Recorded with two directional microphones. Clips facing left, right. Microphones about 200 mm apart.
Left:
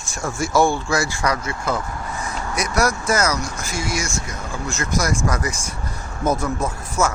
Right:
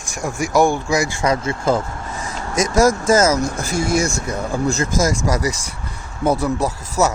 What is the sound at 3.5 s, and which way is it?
Speech, 55° right (ahead or behind).